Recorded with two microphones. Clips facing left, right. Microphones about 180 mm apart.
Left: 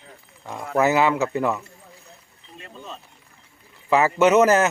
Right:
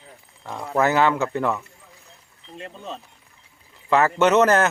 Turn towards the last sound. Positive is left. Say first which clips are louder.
# left 1 dB
turn(degrees=10)  # may be behind; listen again after turning